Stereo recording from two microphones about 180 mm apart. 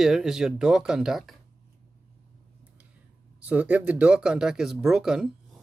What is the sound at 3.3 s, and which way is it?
Speech, 5° right (ahead or behind).